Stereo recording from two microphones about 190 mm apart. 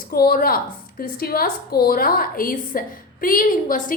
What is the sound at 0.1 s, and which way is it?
A woman's voice, 50° left (ahead or behind).